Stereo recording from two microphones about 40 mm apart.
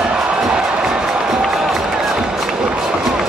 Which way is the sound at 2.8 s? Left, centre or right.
Centre.